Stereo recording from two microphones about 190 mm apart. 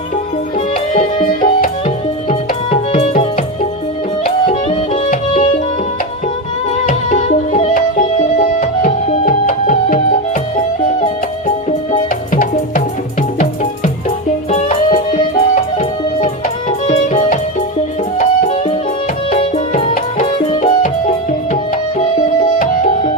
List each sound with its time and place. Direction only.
2.6 s music: 40° left (ahead or behind)
6.8 s music: 40° left (ahead or behind)
11.0 s music: 40° left (ahead or behind)
14.5 s music: 40° left (ahead or behind)
20.2 s music: 25° left (ahead or behind)
22.5 s music: 45° left (ahead or behind)